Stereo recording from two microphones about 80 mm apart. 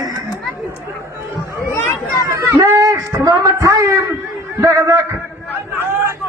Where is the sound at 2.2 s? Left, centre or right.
Right.